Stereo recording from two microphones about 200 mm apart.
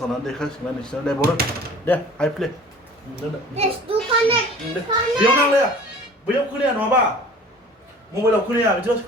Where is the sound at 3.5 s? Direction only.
30° right (ahead or behind).